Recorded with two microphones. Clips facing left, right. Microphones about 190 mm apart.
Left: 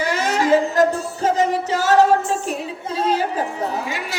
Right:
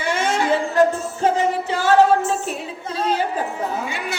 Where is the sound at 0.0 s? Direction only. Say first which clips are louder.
Left 1 dB; 40° left (ahead or behind).